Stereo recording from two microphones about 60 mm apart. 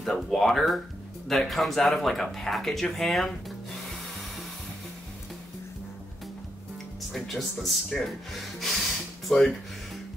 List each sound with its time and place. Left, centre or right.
0.0 s speech: centre
7.1 s speech: centre